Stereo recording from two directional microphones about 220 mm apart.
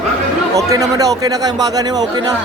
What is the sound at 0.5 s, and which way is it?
A man's voice, 15° right (ahead or behind).